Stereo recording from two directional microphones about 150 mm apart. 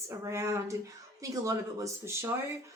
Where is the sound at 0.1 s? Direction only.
20° right (ahead or behind).